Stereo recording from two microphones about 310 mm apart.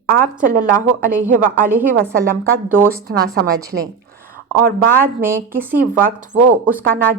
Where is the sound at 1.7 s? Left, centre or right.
Centre.